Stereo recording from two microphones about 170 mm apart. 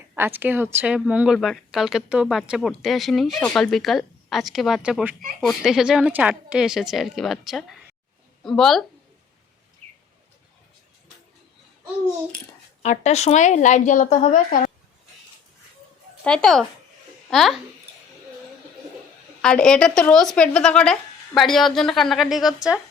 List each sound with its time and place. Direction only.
0.1 s speech: 10° right (ahead or behind)
12.8 s a woman's voice: 40° left (ahead or behind)
16.2 s a child's voice: 5° left (ahead or behind)
19.4 s speech: 5° left (ahead or behind)